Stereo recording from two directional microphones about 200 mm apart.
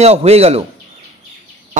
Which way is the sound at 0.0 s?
30° right (ahead or behind).